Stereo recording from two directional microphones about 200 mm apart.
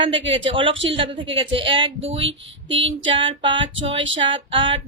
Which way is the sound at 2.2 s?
70° right (ahead or behind).